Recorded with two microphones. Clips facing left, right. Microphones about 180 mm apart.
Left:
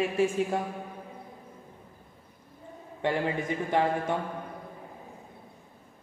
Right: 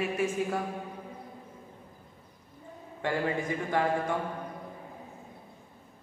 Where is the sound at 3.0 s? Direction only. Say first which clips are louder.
Left 2 dB; 20° left (ahead or behind).